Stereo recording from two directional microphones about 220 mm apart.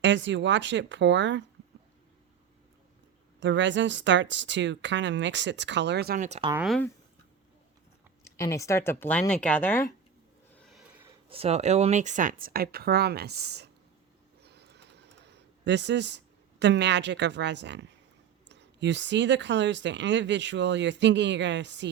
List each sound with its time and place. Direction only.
0.0 s speech: 55° right (ahead or behind)
3.4 s speech: 55° right (ahead or behind); by 6.5 s 30° right (ahead or behind)
6.5 s speech: 5° right (ahead or behind)
8.2 s speech: 15° left (ahead or behind)
10.5 s a sound: centre (ahead or behind)
11.3 s speech: 25° right (ahead or behind); by 13.7 s 50° right (ahead or behind)
14.4 s a sound: 50° right (ahead or behind)
18.4 s speech: 55° right (ahead or behind)